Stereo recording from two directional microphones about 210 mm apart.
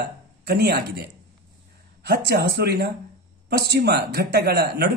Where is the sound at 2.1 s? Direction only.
50° right (ahead or behind).